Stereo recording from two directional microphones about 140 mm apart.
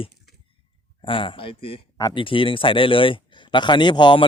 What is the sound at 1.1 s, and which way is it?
Speech, 40° left (ahead or behind).